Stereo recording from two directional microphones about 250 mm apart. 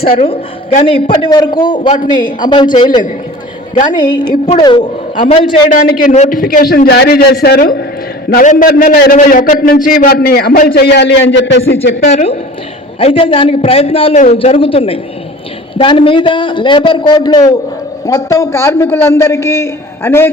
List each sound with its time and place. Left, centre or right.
0.2 s a man's voice: left
12.1 s a man's voice: left; by 20.3 s centre